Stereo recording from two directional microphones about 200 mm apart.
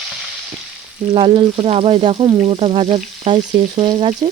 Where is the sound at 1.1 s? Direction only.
25° right (ahead or behind).